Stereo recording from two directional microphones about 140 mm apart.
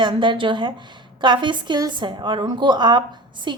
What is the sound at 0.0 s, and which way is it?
A woman's voice, 35° right (ahead or behind).